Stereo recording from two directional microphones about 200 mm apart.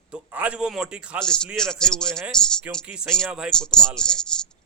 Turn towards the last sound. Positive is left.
turn(degrees=5)  # may be behind; listen again after turning